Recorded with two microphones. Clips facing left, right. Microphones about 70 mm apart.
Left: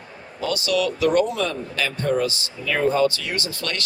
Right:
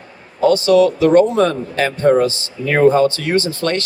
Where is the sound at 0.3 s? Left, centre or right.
Right.